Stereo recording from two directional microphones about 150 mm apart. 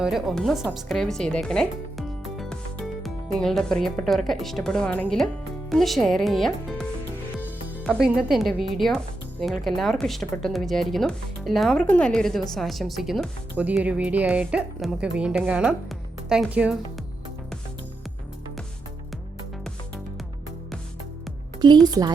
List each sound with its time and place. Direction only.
0.0 s speech: 5° right (ahead or behind)
7.9 s a woman's voice: centre (ahead or behind)
21.6 s a woman's voice: 30° right (ahead or behind)